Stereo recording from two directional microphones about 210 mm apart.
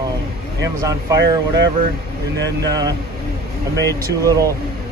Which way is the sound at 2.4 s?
15° right (ahead or behind).